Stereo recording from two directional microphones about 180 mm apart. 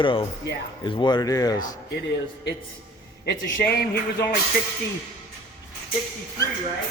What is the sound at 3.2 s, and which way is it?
Speech, 60° left (ahead or behind).